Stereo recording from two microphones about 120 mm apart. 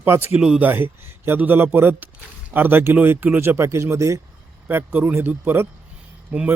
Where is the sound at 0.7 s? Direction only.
20° right (ahead or behind).